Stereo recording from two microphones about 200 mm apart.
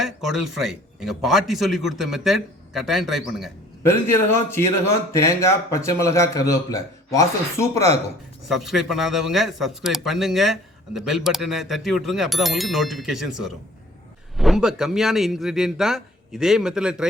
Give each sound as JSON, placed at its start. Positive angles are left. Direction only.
{"t": 0.0, "sound": "a man's voice", "side_deg": 0}
{"t": 3.8, "sound": "speech", "side_deg": 10}
{"t": 8.4, "sound": "a man's voice", "side_deg": 0}